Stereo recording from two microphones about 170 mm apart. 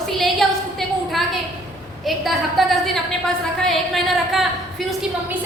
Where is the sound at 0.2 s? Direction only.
Centre (ahead or behind).